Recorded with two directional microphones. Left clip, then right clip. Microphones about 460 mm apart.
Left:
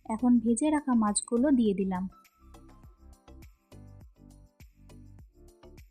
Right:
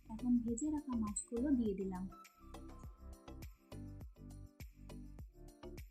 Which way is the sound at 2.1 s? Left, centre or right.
Centre.